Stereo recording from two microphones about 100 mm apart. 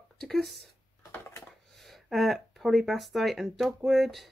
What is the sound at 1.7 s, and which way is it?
Speech, centre (ahead or behind).